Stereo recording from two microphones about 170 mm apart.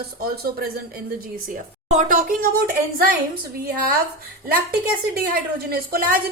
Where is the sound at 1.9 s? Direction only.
50° right (ahead or behind).